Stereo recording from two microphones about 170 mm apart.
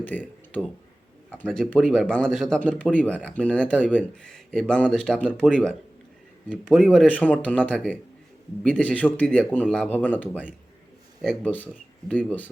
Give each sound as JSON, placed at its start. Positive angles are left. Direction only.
{"t": 0.0, "sound": "speech", "side_deg": 10}